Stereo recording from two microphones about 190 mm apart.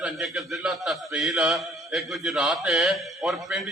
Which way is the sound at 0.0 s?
Centre (ahead or behind).